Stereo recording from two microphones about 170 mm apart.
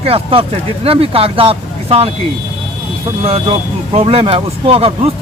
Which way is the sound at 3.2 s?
35° right (ahead or behind).